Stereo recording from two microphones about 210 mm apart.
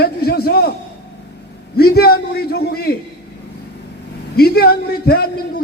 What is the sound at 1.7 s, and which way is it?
A man's voice, 50° left (ahead or behind).